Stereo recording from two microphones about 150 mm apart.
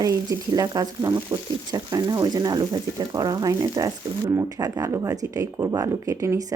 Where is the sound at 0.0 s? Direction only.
25° right (ahead or behind).